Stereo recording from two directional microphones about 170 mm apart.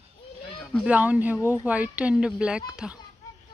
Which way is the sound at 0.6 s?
5° left (ahead or behind).